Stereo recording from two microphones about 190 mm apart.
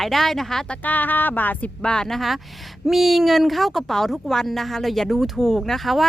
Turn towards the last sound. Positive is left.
turn(degrees=0)  # may be behind; listen again after turning